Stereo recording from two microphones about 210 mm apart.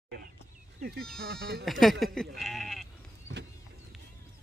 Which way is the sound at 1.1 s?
50° right (ahead or behind).